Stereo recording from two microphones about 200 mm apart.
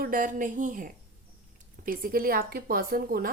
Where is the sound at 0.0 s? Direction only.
45° right (ahead or behind).